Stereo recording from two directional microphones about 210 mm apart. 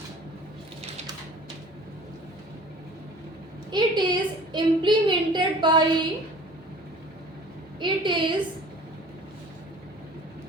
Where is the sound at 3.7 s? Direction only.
20° right (ahead or behind).